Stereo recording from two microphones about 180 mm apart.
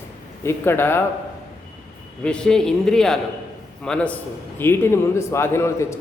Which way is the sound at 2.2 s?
5° left (ahead or behind).